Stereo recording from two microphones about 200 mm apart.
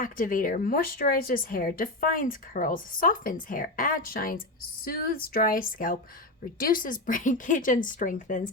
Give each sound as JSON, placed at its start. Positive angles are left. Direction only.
{"t": 0.0, "sound": "speech", "side_deg": 45}